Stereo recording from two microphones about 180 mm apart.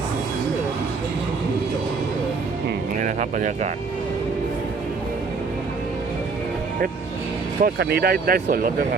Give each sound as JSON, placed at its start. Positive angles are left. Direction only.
{"t": 3.0, "sound": "speech", "side_deg": -45}
{"t": 7.6, "sound": "speech", "side_deg": -65}